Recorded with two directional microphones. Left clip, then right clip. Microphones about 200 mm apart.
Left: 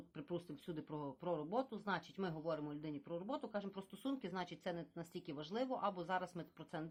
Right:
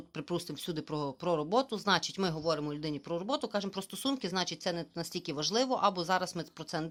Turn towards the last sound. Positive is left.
turn(degrees=-30)  # may be behind; listen again after turning